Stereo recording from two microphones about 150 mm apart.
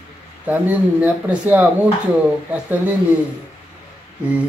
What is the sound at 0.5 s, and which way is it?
Speech, 10° right (ahead or behind).